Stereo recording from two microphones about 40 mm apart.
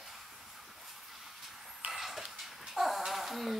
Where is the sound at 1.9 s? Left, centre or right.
Centre.